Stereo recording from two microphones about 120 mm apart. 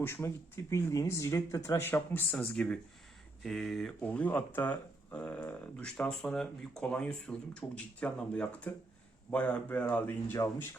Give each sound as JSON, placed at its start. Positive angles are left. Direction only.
{"t": 0.0, "sound": "speech", "side_deg": 20}
{"t": 4.0, "sound": "speech", "side_deg": 10}
{"t": 10.3, "sound": "speech", "side_deg": 30}